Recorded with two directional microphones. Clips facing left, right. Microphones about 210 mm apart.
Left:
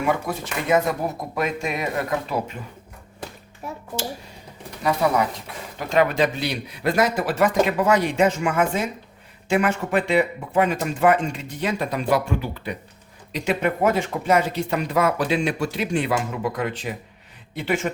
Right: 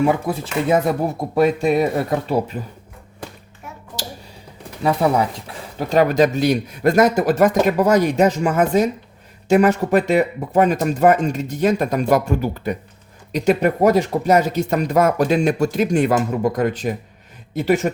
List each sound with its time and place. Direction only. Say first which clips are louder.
0.0 s speech: right 5 dB; 30° right (ahead or behind)
4.8 s speech: right 3 dB; 25° right (ahead or behind)
5.9 s speech: right 4 dB; 40° right (ahead or behind)